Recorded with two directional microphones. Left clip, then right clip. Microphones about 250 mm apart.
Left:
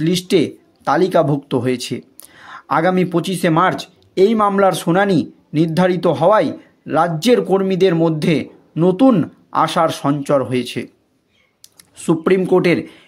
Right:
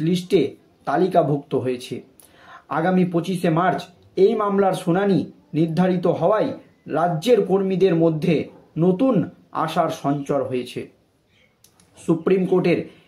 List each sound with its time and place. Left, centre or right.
0.0 s speech: left
12.1 s speech: left